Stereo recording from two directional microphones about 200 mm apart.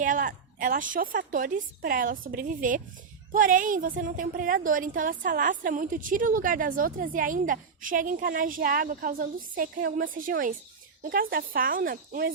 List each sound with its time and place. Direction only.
0.0 s a woman's voice: 40° right (ahead or behind)